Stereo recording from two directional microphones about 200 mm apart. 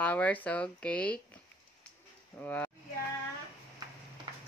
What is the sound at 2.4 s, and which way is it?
Speech, 10° left (ahead or behind).